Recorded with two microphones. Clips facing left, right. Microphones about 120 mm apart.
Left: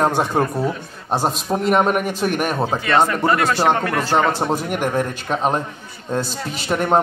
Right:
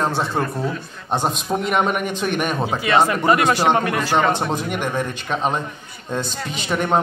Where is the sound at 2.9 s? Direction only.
10° right (ahead or behind).